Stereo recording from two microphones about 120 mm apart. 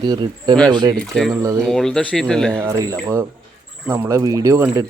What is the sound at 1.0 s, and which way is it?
Speech, centre (ahead or behind).